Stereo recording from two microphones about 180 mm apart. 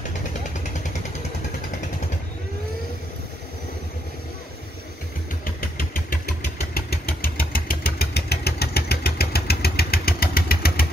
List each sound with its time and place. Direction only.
5.4 s engine: 55° left (ahead or behind)